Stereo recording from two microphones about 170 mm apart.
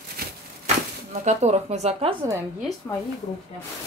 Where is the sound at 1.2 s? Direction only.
40° right (ahead or behind).